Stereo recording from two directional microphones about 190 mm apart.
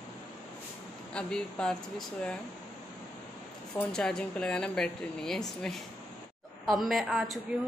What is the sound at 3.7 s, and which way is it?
A man's voice, 5° left (ahead or behind).